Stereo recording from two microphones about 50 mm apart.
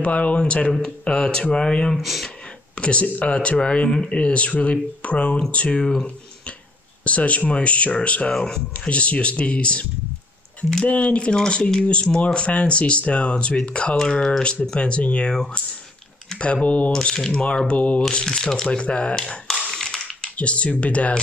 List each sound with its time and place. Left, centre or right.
0.0 s speech: left
2.0 s speech: centre
2.7 s speech: left
7.1 s speech: left
8.3 s speech: centre
8.8 s speech: left
10.9 s speech: left
15.3 s speech: centre
16.6 s speech: left
16.9 s speech: centre
18.2 s speech: centre
19.8 s a sound: centre
20.3 s speech: left